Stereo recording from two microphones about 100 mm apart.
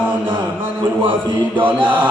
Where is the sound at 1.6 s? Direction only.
55° right (ahead or behind).